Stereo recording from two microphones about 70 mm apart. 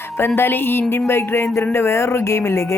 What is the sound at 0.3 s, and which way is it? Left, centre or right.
A woman's voice, left.